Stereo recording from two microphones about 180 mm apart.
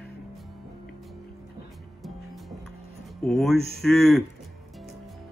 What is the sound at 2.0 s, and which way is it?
Music, centre (ahead or behind).